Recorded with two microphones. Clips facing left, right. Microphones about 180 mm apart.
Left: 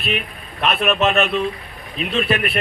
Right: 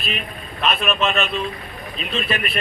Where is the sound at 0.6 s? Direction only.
60° left (ahead or behind).